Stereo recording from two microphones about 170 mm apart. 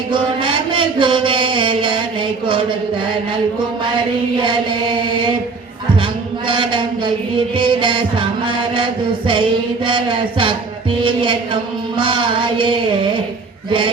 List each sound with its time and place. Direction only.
0.1 s a sound: 30° right (ahead or behind)
6.5 s music: 30° right (ahead or behind)
13.7 s a man's voice: 30° right (ahead or behind)